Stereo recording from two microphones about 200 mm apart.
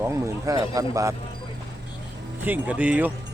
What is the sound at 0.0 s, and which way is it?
Speech, 15° right (ahead or behind).